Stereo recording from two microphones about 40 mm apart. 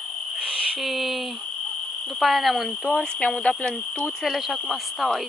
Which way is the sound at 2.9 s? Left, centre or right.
Left.